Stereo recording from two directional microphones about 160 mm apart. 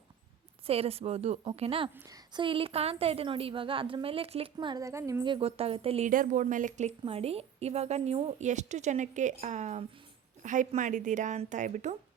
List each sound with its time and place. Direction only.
0.7 s a woman's voice: 40° right (ahead or behind)
1.9 s a woman's voice: 15° right (ahead or behind); by 4.5 s 35° right (ahead or behind)
4.5 s a woman's voice: 25° right (ahead or behind)
5.2 s a woman's voice: 35° right (ahead or behind)
6.1 s a woman's voice: 55° right (ahead or behind)
7.0 s a woman's voice: 40° right (ahead or behind)